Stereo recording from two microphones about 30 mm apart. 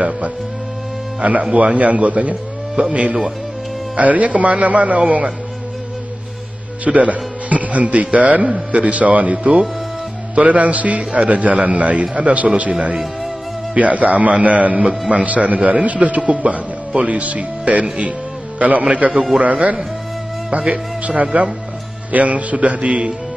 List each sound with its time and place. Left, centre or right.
1.2 s speech: right
6.8 s a man's voice: right
11.0 s speech: right
13.7 s speech: right
14.9 s a man's voice: right
15.2 s a man's voice: right